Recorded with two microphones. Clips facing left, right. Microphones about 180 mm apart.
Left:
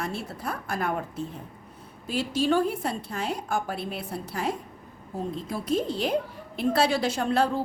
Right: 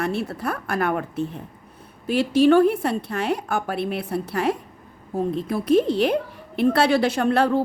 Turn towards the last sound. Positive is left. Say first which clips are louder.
# right 5 dB
turn(degrees=-65)  # may be behind; listen again after turning